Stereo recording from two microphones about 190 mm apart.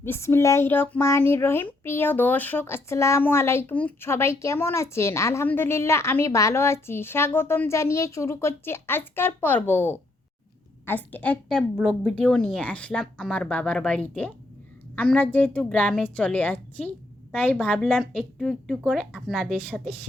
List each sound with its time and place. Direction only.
0.0 s speech: 10° left (ahead or behind)